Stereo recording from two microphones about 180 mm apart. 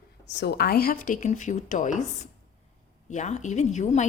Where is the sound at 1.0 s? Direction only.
45° left (ahead or behind).